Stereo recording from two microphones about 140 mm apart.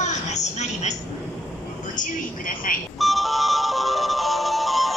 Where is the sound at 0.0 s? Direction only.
55° left (ahead or behind).